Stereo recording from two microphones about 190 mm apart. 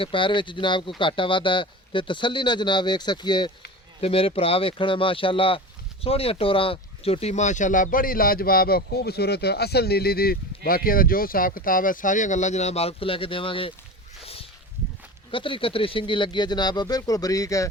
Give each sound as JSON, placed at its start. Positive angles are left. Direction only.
{"t": 0.0, "sound": "speech", "side_deg": 25}
{"t": 15.3, "sound": "speech", "side_deg": 25}